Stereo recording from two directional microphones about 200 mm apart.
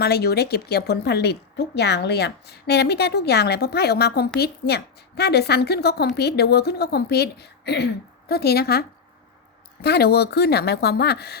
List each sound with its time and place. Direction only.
0.0 s a woman's voice: 55° left (ahead or behind)
9.8 s a woman's voice: 50° left (ahead or behind)